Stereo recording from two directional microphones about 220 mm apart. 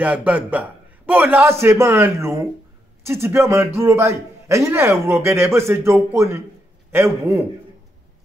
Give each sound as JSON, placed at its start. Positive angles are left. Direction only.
{"t": 0.0, "sound": "a man's voice", "side_deg": -5}